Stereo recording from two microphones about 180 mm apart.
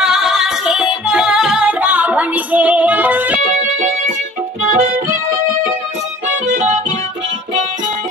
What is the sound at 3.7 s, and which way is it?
Music, 45° right (ahead or behind).